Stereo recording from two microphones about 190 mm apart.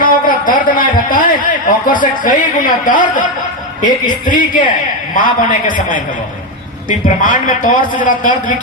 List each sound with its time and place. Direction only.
0.0 s a man's voice: 45° left (ahead or behind)
4.3 s a man's voice: 45° left (ahead or behind)
7.2 s a man's voice: 45° left (ahead or behind)